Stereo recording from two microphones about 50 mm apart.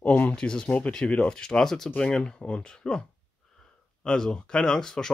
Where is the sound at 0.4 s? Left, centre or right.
Centre.